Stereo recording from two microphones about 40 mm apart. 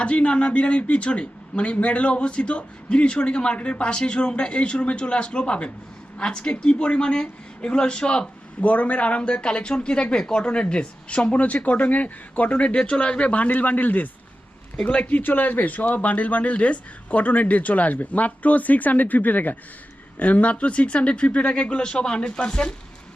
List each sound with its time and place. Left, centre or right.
0.0 s speech: left
8.6 s speech: left
15.2 s a man's voice: left
21.8 s speech: left